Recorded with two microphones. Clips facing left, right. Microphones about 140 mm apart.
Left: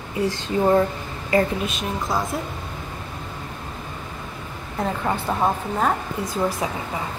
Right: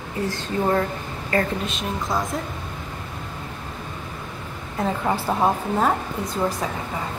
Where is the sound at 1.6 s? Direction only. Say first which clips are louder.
Left 1 dB; centre (ahead or behind).